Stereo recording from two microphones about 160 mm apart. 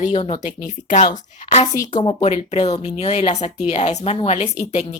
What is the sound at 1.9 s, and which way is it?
Speech, 30° left (ahead or behind).